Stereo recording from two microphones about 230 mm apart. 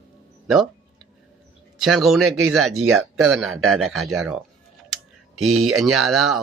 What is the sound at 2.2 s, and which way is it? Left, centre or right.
Speech, right.